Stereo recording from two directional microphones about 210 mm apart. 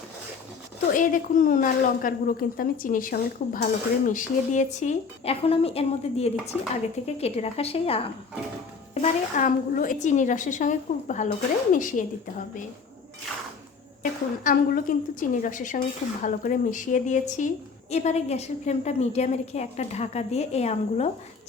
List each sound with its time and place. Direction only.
0.9 s a woman's voice: 40° left (ahead or behind)
6.5 s speech: 5° right (ahead or behind)
7.2 s a woman's voice: 30° left (ahead or behind)
9.0 s a woman's voice: 40° left (ahead or behind)
14.0 s a woman's voice: 40° left (ahead or behind)